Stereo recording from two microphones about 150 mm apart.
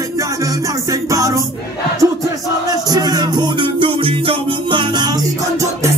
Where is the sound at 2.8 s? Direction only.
25° right (ahead or behind).